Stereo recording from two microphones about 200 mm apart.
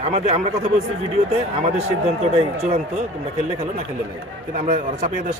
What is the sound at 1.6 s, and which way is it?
Speech, 35° right (ahead or behind).